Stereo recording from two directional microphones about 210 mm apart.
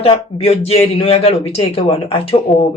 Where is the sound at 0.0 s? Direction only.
30° left (ahead or behind).